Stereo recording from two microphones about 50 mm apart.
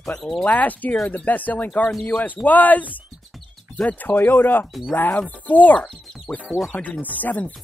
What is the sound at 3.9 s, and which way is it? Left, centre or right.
Speech, left.